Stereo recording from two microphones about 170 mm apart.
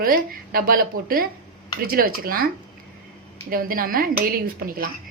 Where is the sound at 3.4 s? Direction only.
55° right (ahead or behind).